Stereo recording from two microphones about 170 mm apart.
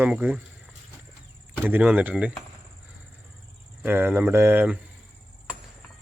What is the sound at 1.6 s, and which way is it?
Speech, 10° right (ahead or behind).